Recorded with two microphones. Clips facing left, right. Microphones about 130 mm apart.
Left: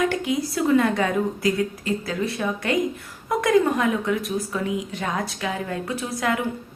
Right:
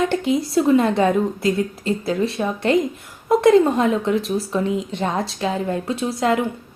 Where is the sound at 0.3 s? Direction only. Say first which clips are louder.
Right 4 dB; 25° right (ahead or behind).